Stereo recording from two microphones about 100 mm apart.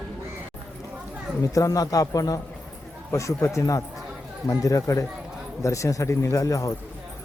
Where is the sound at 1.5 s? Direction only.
35° left (ahead or behind).